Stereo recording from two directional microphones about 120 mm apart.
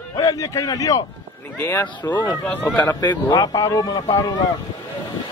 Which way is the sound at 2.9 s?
30° left (ahead or behind).